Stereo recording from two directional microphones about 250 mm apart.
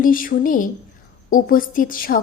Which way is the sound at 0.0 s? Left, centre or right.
Left.